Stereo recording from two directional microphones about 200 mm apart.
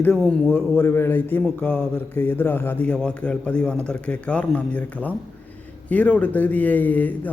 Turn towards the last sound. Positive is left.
turn(degrees=10)  # may be behind; listen again after turning